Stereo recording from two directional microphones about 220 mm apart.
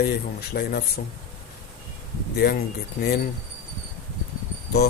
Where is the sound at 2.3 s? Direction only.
45° left (ahead or behind).